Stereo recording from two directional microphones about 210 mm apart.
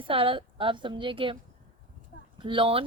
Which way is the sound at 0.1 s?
25° right (ahead or behind).